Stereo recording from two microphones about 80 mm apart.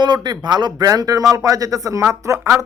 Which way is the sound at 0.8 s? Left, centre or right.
Right.